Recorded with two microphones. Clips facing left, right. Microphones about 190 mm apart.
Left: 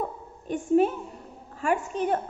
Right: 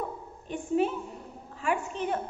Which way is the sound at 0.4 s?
45° left (ahead or behind).